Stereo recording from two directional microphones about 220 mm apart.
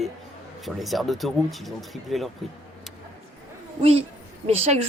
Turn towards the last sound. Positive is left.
turn(degrees=-30)  # may be behind; listen again after turning